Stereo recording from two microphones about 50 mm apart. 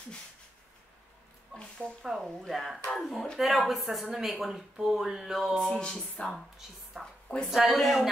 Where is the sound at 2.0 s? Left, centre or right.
Centre.